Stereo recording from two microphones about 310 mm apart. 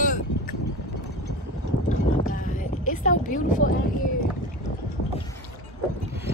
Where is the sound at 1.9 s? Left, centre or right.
Left.